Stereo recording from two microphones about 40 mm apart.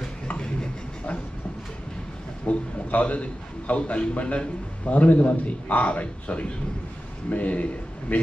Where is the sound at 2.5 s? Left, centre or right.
Left.